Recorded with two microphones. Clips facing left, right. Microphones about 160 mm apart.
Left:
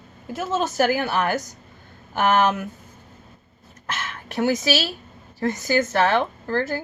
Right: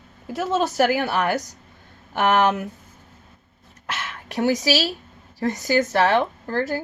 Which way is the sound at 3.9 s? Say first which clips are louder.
Even; 15° right (ahead or behind).